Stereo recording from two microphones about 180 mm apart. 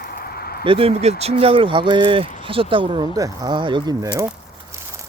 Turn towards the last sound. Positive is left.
turn(degrees=-20)  # may be behind; listen again after turning